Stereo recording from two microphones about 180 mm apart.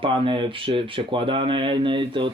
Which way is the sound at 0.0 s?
30° right (ahead or behind).